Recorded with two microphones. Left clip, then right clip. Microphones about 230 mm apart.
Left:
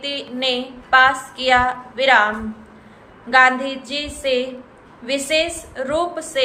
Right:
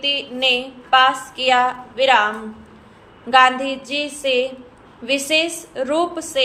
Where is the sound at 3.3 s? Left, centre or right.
Right.